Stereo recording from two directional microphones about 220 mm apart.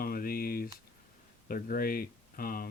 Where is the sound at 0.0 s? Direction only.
40° left (ahead or behind).